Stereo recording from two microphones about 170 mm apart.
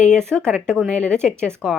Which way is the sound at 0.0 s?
5° left (ahead or behind).